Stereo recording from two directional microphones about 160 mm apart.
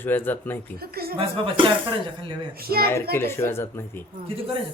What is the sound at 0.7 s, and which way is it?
Speech, 70° right (ahead or behind).